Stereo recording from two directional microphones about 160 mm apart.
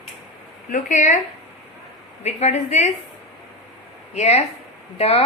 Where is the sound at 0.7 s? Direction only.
50° left (ahead or behind).